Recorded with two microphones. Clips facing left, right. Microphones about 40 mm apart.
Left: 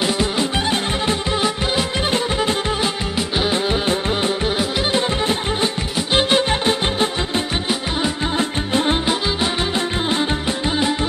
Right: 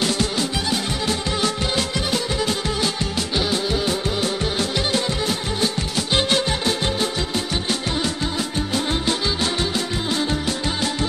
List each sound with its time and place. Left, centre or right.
0.0 s music: centre
2.0 s music: left
5.9 s music: centre
6.5 s music: left